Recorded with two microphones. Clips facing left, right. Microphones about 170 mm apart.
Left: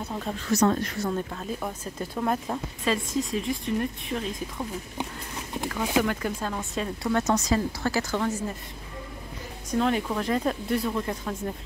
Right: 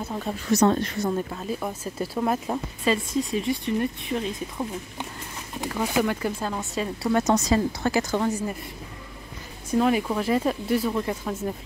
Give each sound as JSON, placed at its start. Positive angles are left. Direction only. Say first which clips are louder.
{"t": 0.0, "sound": "speech", "louder": "right 2 dB", "side_deg": -5}
{"t": 0.6, "sound": "speech", "louder": "right 2 dB", "side_deg": -25}
{"t": 5.7, "sound": "speech", "louder": "right 1 dB", "side_deg": -5}
{"t": 9.7, "sound": "speech", "louder": "right 3 dB", "side_deg": -5}